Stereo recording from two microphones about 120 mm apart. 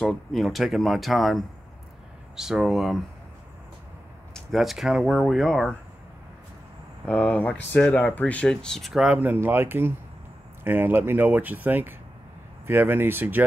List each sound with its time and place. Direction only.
0.0 s speech: centre (ahead or behind)
4.3 s speech: centre (ahead or behind)
7.1 s speech: 10° left (ahead or behind)
9.2 s speech: 15° right (ahead or behind)